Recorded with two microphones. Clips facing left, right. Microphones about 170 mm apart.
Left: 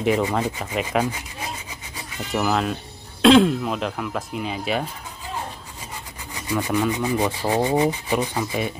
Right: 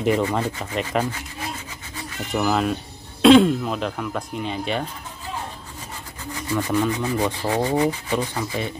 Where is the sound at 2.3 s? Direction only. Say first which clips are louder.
Right 1 dB; centre (ahead or behind).